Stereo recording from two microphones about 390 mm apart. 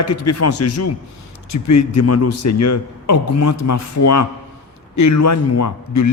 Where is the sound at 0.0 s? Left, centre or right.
Left.